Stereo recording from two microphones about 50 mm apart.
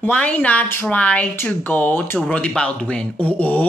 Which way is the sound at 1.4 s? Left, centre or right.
Left.